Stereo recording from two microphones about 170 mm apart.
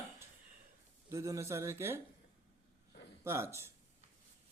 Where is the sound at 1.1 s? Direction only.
20° right (ahead or behind).